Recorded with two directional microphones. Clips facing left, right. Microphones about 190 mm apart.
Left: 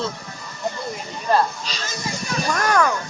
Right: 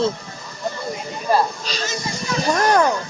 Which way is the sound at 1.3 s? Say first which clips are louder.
Right 1 dB; 10° right (ahead or behind).